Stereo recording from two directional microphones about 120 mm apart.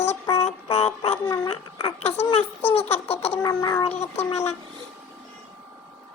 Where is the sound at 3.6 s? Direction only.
35° left (ahead or behind).